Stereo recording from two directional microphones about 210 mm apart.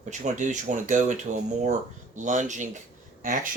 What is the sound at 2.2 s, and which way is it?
Speech, 35° right (ahead or behind).